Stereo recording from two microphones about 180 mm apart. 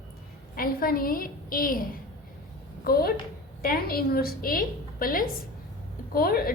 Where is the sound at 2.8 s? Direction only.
55° left (ahead or behind).